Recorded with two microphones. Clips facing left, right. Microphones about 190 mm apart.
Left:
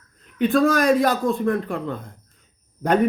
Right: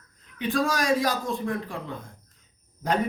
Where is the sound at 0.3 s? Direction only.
55° left (ahead or behind).